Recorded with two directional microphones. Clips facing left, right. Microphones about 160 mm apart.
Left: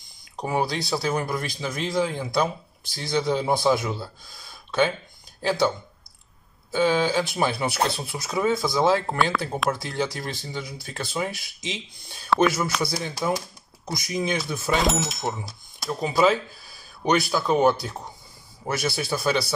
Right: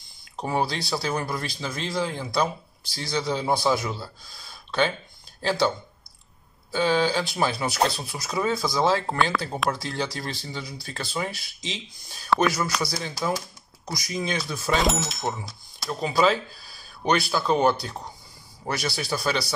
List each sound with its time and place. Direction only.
0.2 s speech: 15° left (ahead or behind)
6.7 s speech: 15° left (ahead or behind)
12.3 s speech: centre (ahead or behind)
12.8 s speech: 20° left (ahead or behind)
14.7 s speech: centre (ahead or behind)
15.9 s speech: 20° left (ahead or behind)
18.7 s speech: 25° left (ahead or behind)